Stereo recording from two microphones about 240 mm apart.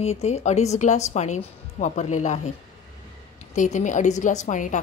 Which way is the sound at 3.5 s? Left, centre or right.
Left.